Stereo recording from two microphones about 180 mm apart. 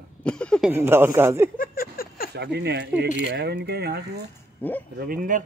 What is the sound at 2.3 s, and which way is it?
Speech, 70° right (ahead or behind).